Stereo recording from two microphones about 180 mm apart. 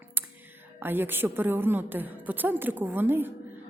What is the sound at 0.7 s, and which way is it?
A woman's voice, 10° right (ahead or behind).